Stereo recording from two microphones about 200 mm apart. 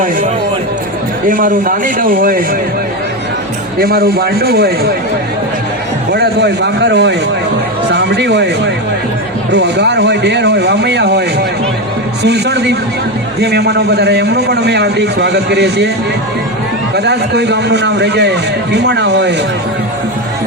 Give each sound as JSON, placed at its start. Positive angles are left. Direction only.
{"t": 1.3, "sound": "speech", "side_deg": -45}
{"t": 3.8, "sound": "speech", "side_deg": -50}
{"t": 6.1, "sound": "a man's voice", "side_deg": -55}
{"t": 12.2, "sound": "a man's voice", "side_deg": -55}
{"t": 16.9, "sound": "a man's voice", "side_deg": -55}